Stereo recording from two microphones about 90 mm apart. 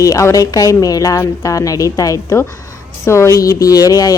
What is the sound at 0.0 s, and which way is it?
A woman's voice, 35° left (ahead or behind).